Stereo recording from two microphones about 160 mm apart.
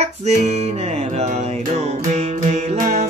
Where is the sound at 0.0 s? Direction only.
45° right (ahead or behind).